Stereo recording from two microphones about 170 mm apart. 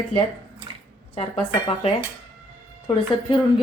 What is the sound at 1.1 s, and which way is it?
A woman's voice, 35° left (ahead or behind).